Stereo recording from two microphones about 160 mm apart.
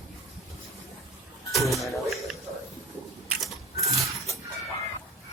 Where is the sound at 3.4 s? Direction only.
Centre (ahead or behind).